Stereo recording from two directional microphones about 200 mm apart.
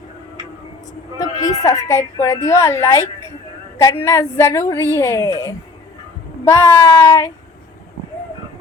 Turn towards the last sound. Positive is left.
turn(degrees=15)  # may be behind; listen again after turning